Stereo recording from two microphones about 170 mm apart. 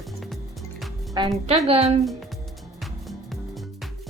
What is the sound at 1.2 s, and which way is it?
Speech, 25° right (ahead or behind).